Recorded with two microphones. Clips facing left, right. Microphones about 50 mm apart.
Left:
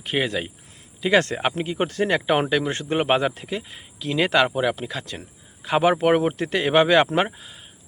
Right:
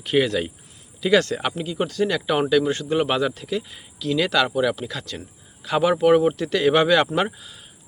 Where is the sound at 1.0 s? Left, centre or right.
Left.